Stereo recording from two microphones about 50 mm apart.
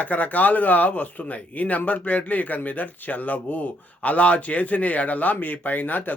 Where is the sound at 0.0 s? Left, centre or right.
Left.